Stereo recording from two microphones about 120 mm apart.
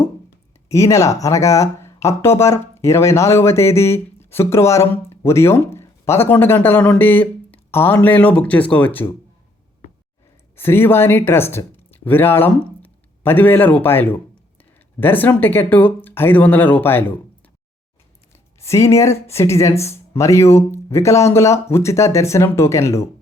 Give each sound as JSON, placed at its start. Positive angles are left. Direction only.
{"t": 0.7, "sound": "speech", "side_deg": 25}
{"t": 10.5, "sound": "speech", "side_deg": 20}
{"t": 18.6, "sound": "speech", "side_deg": 25}